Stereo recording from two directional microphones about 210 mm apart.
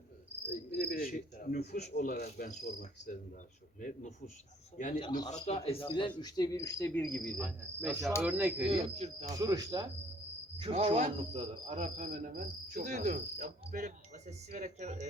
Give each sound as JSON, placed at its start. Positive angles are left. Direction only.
{"t": 0.7, "sound": "cricket", "side_deg": 45}
{"t": 3.8, "sound": "a man's voice", "side_deg": 40}
{"t": 4.9, "sound": "a man's voice", "side_deg": 20}
{"t": 7.1, "sound": "cricket", "side_deg": 0}
{"t": 8.2, "sound": "speech", "side_deg": -10}
{"t": 8.7, "sound": "cricket", "side_deg": -30}
{"t": 9.3, "sound": "speech", "side_deg": -15}
{"t": 10.6, "sound": "cricket", "side_deg": -25}